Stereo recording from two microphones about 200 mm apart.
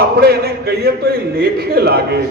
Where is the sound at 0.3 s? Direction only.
55° right (ahead or behind).